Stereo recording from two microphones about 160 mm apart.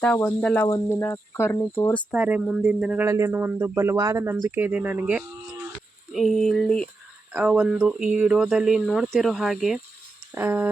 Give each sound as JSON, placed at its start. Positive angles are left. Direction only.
{"t": 0.0, "sound": "speech", "side_deg": 10}
{"t": 2.1, "sound": "speech", "side_deg": -10}
{"t": 3.1, "sound": "speech", "side_deg": -15}
{"t": 6.1, "sound": "speech", "side_deg": 0}
{"t": 7.3, "sound": "speech", "side_deg": -5}
{"t": 10.3, "sound": "speech", "side_deg": -15}